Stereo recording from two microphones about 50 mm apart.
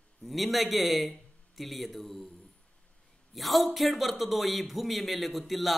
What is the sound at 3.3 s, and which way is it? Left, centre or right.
A man's voice, centre.